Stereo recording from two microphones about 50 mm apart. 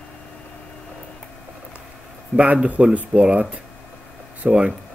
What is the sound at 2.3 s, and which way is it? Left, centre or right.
Speech, right.